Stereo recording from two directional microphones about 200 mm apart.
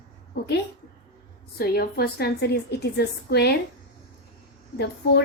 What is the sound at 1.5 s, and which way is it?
A woman's voice, 50° left (ahead or behind).